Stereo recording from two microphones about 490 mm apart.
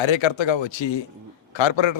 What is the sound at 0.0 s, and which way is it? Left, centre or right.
A man's voice, left.